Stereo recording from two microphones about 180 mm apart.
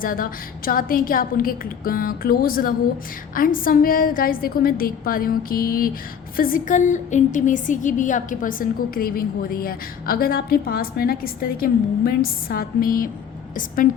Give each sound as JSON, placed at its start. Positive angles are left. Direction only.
{"t": 0.0, "sound": "a woman's voice", "side_deg": 50}